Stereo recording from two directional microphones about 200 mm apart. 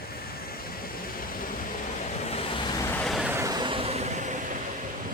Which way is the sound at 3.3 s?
15° right (ahead or behind).